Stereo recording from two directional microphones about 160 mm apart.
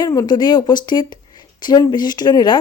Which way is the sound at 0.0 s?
25° left (ahead or behind).